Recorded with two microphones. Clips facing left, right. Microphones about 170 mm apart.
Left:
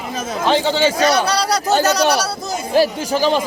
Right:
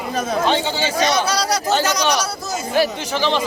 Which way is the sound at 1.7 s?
35° left (ahead or behind).